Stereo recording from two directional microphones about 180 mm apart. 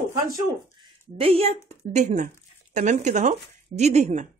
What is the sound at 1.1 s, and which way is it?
Speech, 35° right (ahead or behind).